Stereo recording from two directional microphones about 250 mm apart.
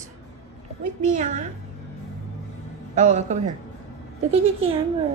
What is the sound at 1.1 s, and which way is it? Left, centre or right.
Speech, right.